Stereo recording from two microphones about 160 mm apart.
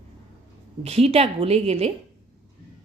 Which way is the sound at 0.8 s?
40° right (ahead or behind).